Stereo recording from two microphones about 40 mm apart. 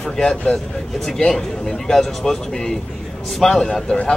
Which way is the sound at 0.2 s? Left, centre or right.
Centre.